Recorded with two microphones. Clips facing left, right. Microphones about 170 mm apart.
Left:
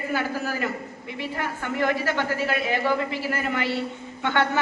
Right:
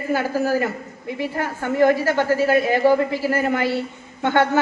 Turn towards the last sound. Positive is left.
turn(degrees=-40)  # may be behind; listen again after turning